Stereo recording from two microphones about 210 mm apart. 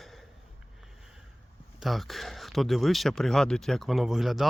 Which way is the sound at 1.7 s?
Centre (ahead or behind).